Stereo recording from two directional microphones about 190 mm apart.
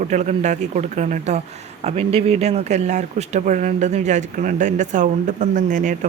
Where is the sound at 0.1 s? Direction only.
40° right (ahead or behind).